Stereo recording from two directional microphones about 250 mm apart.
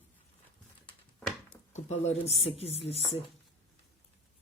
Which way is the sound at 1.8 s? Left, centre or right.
Left.